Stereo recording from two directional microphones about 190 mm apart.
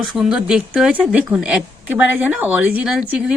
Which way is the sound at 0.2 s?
5° right (ahead or behind).